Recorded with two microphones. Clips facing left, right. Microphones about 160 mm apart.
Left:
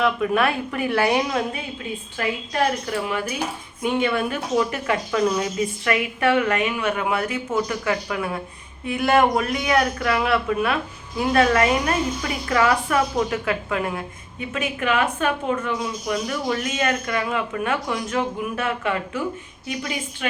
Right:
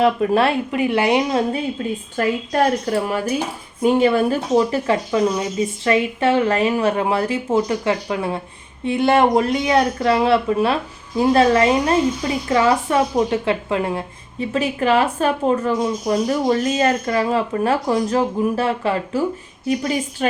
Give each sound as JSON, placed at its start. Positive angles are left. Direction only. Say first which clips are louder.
{"t": 0.0, "sound": "speech", "louder": "right 4 dB", "side_deg": -30}
{"t": 2.1, "sound": "speech", "louder": "right 5 dB", "side_deg": -40}